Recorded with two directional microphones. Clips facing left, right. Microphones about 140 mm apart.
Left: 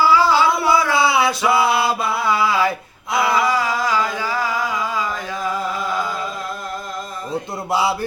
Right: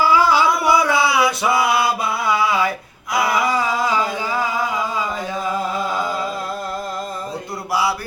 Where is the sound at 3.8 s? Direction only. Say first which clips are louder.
Even; 20° right (ahead or behind).